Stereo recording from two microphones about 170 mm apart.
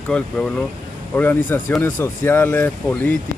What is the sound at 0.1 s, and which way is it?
Speech, 5° left (ahead or behind).